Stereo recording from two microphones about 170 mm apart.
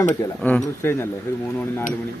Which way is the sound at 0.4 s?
10° left (ahead or behind).